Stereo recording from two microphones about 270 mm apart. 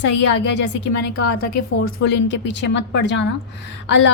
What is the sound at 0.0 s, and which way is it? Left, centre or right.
Speech, left.